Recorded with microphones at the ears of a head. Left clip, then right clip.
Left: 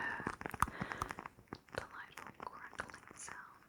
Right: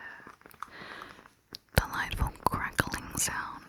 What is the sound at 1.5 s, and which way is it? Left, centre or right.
Whispering, right.